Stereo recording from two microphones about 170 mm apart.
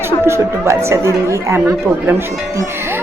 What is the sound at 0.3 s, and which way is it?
A woman's voice, 15° right (ahead or behind).